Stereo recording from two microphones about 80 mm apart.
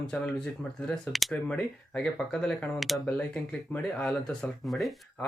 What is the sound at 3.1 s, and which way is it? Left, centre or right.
Speech, centre.